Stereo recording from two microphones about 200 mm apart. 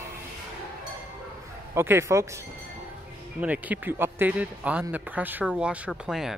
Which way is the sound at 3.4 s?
10° right (ahead or behind).